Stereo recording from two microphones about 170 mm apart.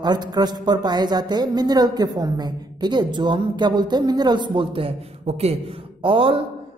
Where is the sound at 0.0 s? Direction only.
25° right (ahead or behind).